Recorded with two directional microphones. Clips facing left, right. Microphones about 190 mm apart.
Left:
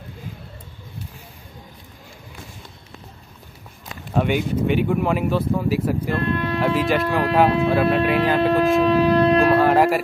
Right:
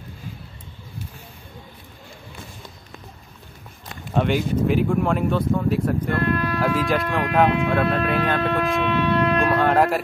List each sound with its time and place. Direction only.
4.1 s speech: 5° left (ahead or behind)
6.1 s speech: 20° left (ahead or behind)
6.6 s speech: centre (ahead or behind)
7.4 s speech: 35° left (ahead or behind)
7.7 s speech: 5° left (ahead or behind)
8.4 s speech: 30° left (ahead or behind)
8.8 s shofar: 35° left (ahead or behind)
9.6 s speech: 5° left (ahead or behind)